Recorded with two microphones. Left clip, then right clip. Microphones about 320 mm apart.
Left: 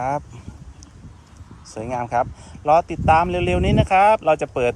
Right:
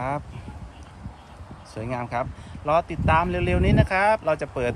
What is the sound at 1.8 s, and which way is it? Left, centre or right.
Speech, centre.